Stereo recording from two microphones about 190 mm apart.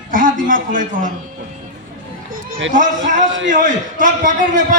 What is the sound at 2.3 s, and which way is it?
A man's voice, 45° right (ahead or behind).